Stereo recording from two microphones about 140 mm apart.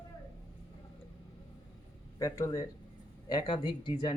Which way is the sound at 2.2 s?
25° left (ahead or behind).